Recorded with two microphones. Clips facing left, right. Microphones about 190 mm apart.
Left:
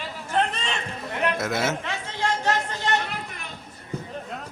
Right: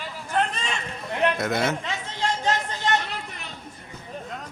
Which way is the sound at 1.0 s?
Centre (ahead or behind).